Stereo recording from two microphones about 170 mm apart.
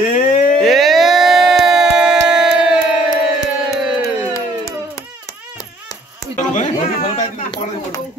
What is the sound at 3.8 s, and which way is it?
Music, 5° right (ahead or behind).